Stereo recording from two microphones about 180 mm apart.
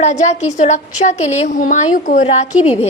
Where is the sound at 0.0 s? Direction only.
40° left (ahead or behind).